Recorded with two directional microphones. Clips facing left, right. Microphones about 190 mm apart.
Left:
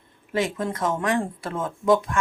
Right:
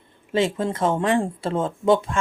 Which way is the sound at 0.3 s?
25° right (ahead or behind).